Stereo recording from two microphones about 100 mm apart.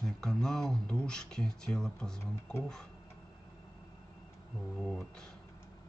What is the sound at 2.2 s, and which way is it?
Speech, 25° left (ahead or behind).